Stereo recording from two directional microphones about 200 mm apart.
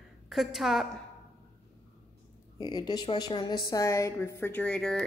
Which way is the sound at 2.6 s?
20° left (ahead or behind).